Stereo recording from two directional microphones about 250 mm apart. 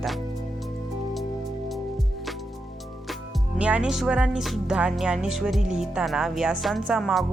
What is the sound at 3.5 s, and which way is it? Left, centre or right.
Speech, centre.